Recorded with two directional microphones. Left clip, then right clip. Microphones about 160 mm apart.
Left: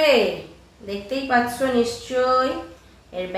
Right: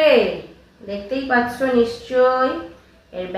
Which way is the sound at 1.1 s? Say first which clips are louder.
Right 1 dB; 15° left (ahead or behind).